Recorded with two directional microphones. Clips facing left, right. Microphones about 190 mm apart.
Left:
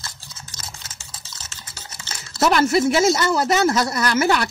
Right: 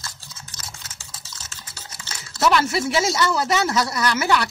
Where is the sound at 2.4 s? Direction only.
50° left (ahead or behind).